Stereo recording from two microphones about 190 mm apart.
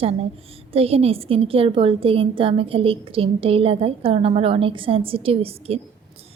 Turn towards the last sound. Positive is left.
turn(degrees=-30)  # may be behind; listen again after turning